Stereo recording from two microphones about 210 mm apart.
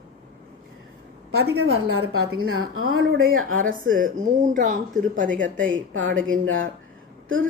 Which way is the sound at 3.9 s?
40° right (ahead or behind).